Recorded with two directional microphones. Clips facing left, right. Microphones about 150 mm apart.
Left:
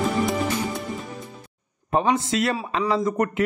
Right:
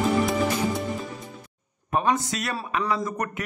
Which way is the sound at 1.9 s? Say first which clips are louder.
Left 3 dB; 25° left (ahead or behind).